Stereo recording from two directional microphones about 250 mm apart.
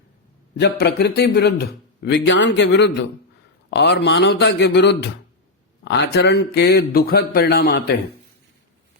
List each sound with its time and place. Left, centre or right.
0.6 s a man's voice: left